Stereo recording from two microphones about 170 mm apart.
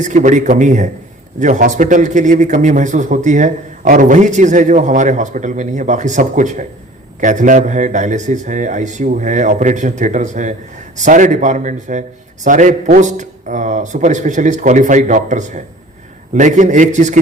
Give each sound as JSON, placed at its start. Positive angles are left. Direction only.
{"t": 0.0, "sound": "a man's voice", "side_deg": -45}